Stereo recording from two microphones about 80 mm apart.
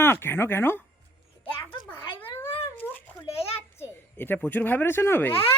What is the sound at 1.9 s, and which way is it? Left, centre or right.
Cat, left.